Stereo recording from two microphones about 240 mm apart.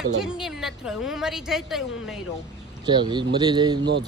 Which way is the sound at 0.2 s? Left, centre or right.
Centre.